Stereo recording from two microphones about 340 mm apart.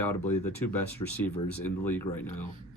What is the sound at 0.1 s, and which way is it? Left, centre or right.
Speech, left.